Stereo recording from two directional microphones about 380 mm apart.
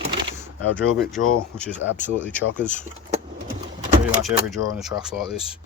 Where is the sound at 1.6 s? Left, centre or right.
Centre.